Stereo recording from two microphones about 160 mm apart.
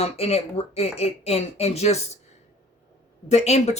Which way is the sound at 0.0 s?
40° left (ahead or behind).